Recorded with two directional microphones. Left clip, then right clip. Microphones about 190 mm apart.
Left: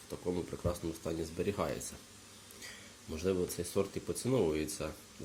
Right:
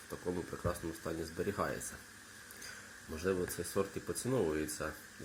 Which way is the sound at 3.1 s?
10° left (ahead or behind).